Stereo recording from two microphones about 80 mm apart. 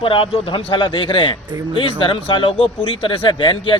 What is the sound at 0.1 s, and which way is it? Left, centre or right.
A man's voice, left.